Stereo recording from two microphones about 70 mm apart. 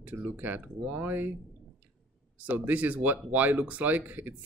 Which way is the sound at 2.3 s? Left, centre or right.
Right.